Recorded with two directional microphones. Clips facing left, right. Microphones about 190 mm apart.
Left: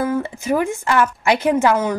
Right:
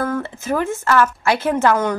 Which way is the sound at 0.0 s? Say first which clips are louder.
Left 2 dB; 15° left (ahead or behind).